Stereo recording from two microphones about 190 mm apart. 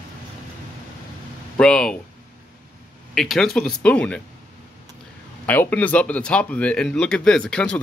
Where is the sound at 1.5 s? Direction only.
5° left (ahead or behind).